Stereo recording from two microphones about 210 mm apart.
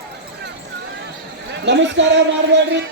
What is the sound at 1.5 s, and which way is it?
A man's voice, 55° right (ahead or behind).